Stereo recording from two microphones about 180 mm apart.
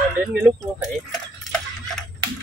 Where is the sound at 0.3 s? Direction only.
5° right (ahead or behind).